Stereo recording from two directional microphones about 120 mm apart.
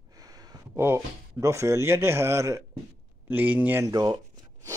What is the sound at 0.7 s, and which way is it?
Speech, 20° right (ahead or behind).